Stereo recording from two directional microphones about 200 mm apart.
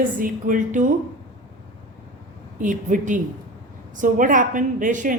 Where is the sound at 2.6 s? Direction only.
40° right (ahead or behind).